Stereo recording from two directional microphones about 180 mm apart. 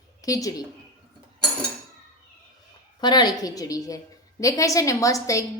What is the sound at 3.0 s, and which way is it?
A woman's voice, 25° left (ahead or behind).